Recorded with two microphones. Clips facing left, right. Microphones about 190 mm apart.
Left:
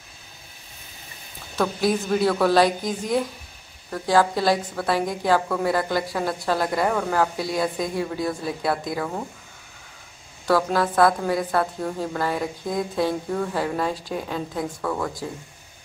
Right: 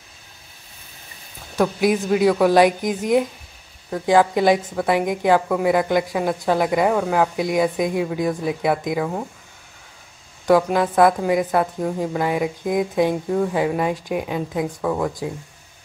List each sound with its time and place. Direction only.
1.6 s a woman's voice: 15° right (ahead or behind)
10.4 s a woman's voice: 15° right (ahead or behind)